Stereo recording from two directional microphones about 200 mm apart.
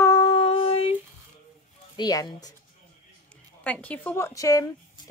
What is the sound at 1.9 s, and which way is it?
Speech, 20° left (ahead or behind).